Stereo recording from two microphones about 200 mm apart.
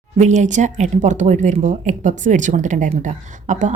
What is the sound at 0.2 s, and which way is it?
Speech, 35° right (ahead or behind).